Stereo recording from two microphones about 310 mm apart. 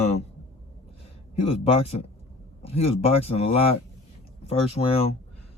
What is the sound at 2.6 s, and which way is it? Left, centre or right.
Speech, centre.